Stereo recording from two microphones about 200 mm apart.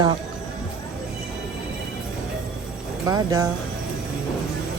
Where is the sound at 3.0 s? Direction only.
20° right (ahead or behind).